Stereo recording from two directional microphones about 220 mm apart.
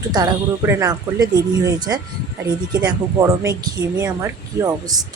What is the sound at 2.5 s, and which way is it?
Speech, 20° right (ahead or behind).